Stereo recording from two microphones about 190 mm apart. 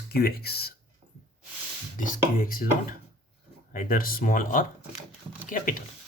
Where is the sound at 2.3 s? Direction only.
45° left (ahead or behind).